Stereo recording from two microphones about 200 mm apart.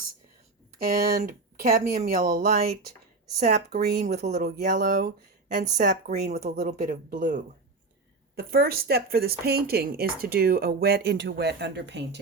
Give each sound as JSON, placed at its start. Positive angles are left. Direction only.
{"t": 0.8, "sound": "speech", "side_deg": -45}
{"t": 6.1, "sound": "speech", "side_deg": -45}